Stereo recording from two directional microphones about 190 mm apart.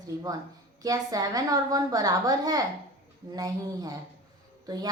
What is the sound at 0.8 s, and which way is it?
A woman's voice, 20° right (ahead or behind).